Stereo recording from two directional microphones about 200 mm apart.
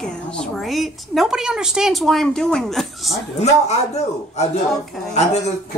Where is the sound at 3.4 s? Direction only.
35° left (ahead or behind).